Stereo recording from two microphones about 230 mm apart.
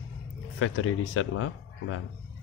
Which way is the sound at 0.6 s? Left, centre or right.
Left.